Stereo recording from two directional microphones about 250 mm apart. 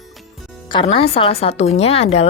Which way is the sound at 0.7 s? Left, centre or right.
Left.